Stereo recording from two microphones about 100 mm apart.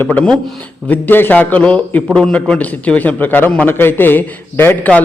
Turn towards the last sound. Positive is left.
turn(degrees=20)  # may be behind; listen again after turning